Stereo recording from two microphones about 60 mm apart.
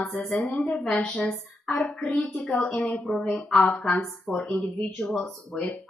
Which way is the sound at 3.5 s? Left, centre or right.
Centre.